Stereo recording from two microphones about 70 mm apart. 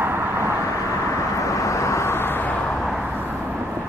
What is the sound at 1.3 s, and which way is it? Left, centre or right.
Vehicle, left.